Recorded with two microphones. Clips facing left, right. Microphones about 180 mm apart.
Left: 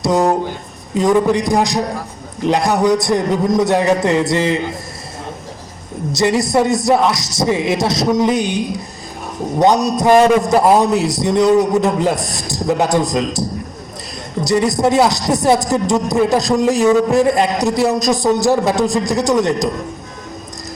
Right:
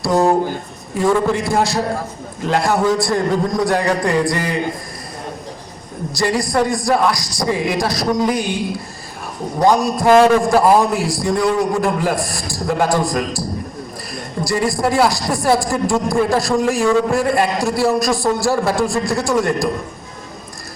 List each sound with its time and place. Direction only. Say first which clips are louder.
0.0 s a man's voice: even; 20° left (ahead or behind)
6.1 s a man's voice: left 4 dB; 20° left (ahead or behind)
14.4 s a man's voice: left 4 dB; 20° left (ahead or behind)